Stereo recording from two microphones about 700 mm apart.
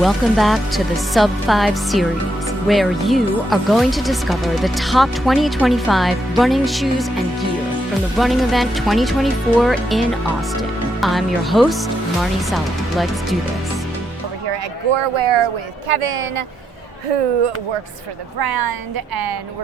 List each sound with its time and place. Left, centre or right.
0.0 s speech: centre
8.2 s speech: centre
14.5 s speech: right
18.3 s a woman's voice: right